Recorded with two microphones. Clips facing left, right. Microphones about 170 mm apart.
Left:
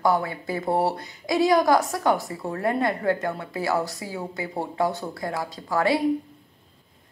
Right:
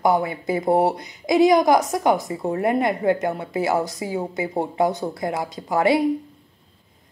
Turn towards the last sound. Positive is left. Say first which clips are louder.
# right 4 dB
turn(degrees=-20)  # may be behind; listen again after turning